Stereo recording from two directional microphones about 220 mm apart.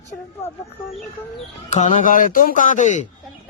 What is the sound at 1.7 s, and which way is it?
Speech, 35° left (ahead or behind).